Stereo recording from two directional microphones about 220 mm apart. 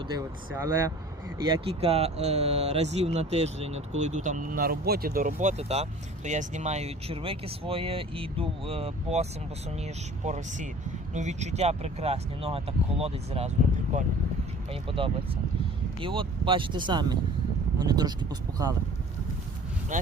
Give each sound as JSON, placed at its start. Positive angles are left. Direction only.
{"t": 0.1, "sound": "speech", "side_deg": -10}
{"t": 1.5, "sound": "speech", "side_deg": -25}
{"t": 14.7, "sound": "speech", "side_deg": -25}
{"t": 19.9, "sound": "speech", "side_deg": -35}